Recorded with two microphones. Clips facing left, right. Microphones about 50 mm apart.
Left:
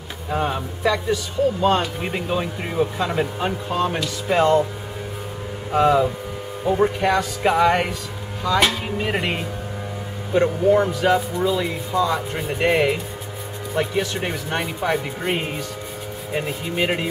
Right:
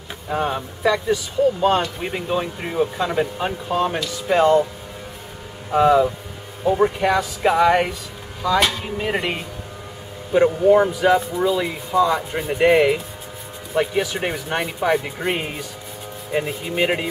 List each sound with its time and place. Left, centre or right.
0.3 s speech: centre
5.7 s speech: centre
10.3 s speech: centre